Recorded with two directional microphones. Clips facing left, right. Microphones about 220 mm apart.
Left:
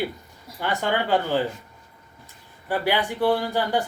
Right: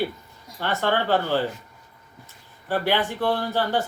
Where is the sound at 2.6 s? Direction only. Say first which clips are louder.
Even; 10° left (ahead or behind).